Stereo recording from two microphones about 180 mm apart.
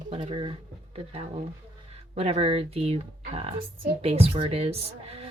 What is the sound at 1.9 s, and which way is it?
Speech, 35° right (ahead or behind).